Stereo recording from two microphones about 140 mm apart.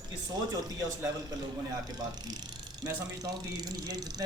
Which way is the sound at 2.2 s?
30° right (ahead or behind).